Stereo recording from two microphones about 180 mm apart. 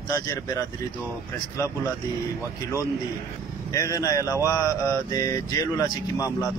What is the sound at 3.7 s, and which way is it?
Speech, 20° left (ahead or behind).